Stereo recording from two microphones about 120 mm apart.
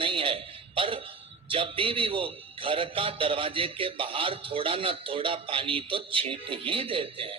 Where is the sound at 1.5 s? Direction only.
45° right (ahead or behind).